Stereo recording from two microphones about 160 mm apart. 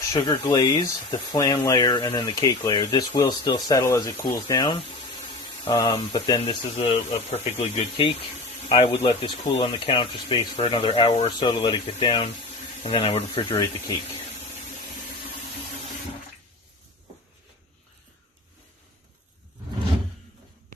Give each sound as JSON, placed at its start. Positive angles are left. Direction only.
{"t": 0.1, "sound": "speech", "side_deg": 25}
{"t": 6.4, "sound": "speech", "side_deg": 40}
{"t": 8.7, "sound": "speech", "side_deg": 35}
{"t": 13.4, "sound": "speech", "side_deg": 20}